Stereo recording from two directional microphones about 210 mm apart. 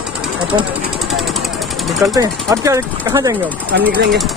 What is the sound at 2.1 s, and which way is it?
Speech, 15° right (ahead or behind).